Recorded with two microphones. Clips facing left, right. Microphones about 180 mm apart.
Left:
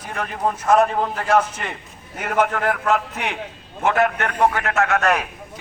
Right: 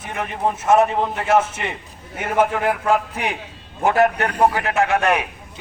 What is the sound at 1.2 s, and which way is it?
Speech, 25° right (ahead or behind).